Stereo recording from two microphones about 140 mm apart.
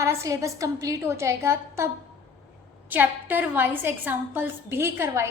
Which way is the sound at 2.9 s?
15° right (ahead or behind).